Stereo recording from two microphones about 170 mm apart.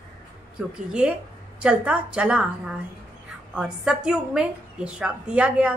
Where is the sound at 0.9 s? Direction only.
5° right (ahead or behind).